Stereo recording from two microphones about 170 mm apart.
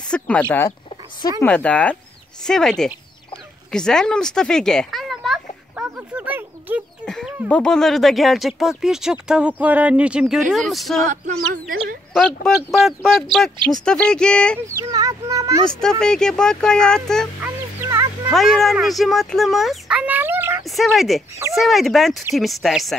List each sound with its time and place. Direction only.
0.0 s speech: 5° left (ahead or behind)
3.7 s a sound: 5° left (ahead or behind)
7.4 s speech: 5° left (ahead or behind)
11.3 s speech: 60° right (ahead or behind)
12.1 s speech: centre (ahead or behind)
14.7 s a child's voice: 20° right (ahead or behind)
15.8 s speech: 5° left (ahead or behind)
17.4 s a sound: 15° right (ahead or behind)
18.3 s speech: centre (ahead or behind); by 20.6 s 15° right (ahead or behind)
20.6 s speech: centre (ahead or behind)